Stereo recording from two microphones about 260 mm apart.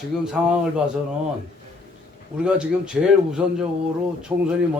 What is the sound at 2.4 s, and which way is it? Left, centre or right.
A man's voice, centre.